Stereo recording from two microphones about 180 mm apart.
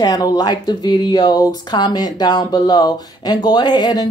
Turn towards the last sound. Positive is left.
turn(degrees=20)  # may be behind; listen again after turning